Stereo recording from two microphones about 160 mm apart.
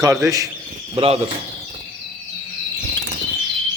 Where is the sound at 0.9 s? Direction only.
35° right (ahead or behind).